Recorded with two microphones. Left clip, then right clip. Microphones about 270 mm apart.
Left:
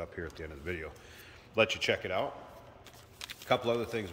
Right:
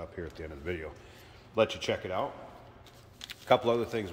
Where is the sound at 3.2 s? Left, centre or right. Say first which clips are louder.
Right 4 dB; centre.